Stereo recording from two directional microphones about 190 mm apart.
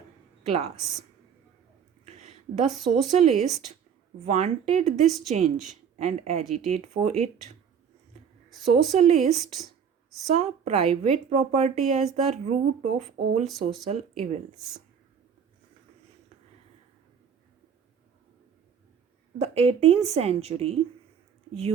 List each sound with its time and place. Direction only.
2.0 s a sound: 35° right (ahead or behind)
3.2 s a woman's voice: 35° right (ahead or behind)
5.0 s a woman's voice: centre (ahead or behind)
5.3 s a woman's voice: 35° right (ahead or behind)
8.6 s a woman's voice: 35° right (ahead or behind)
19.4 s a woman's voice: 35° right (ahead or behind)